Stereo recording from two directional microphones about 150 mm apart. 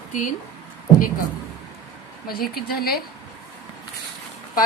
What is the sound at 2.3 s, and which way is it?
Speech, 90° left.